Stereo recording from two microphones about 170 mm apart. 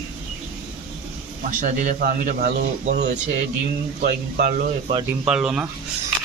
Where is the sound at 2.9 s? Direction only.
70° right (ahead or behind).